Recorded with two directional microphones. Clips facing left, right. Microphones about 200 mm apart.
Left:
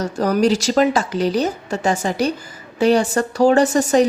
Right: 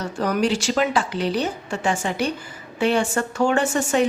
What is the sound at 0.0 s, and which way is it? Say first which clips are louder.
Speech: left 5 dB; 40° left (ahead or behind).